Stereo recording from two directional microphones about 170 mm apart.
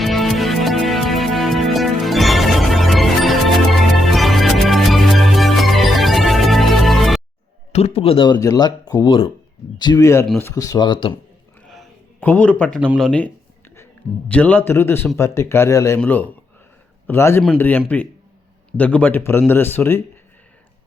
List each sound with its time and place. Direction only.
0.0 s music: centre (ahead or behind)
7.7 s a man's voice: 40° left (ahead or behind); by 10.5 s 10° left (ahead or behind)
10.5 s speech: 20° left (ahead or behind)
12.2 s a man's voice: 10° left (ahead or behind)